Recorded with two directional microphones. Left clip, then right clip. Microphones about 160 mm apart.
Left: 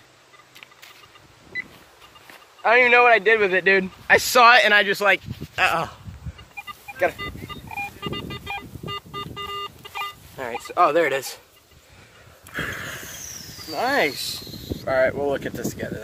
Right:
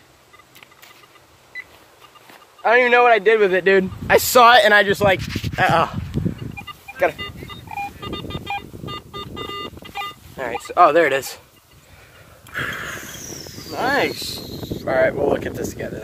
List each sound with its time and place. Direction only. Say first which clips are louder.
2.6 s a man's voice: right 1 dB; 15° right (ahead or behind)
4.5 s a man's voice: right 1 dB; 10° right (ahead or behind)
8.3 s vehicle: right 4 dB; 35° left (ahead or behind)
10.3 s a sound: right 6 dB; 10° right (ahead or behind)
10.7 s a man's voice: right 5 dB; 15° right (ahead or behind)
12.5 s a sound: right 3 dB; 5° right (ahead or behind)
13.8 s speech: right 2 dB; 35° left (ahead or behind)
14.4 s speech: right 3 dB; centre (ahead or behind)